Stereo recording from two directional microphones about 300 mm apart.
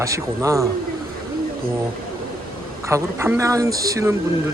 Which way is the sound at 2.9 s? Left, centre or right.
Centre.